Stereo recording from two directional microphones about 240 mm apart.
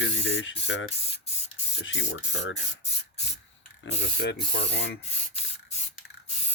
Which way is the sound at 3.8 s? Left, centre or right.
Left.